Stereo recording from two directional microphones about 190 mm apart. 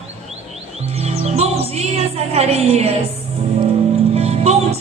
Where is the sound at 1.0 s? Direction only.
35° right (ahead or behind).